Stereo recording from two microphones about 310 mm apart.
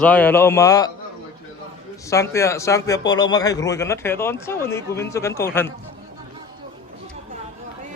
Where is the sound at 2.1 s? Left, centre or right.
Centre.